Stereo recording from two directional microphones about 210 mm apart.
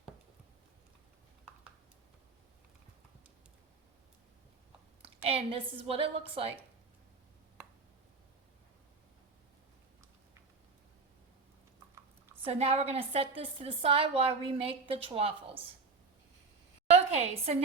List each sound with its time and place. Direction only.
5.0 s a woman's voice: 25° right (ahead or behind)
12.5 s a woman's voice: 30° right (ahead or behind)
16.9 s a woman's voice: 30° right (ahead or behind)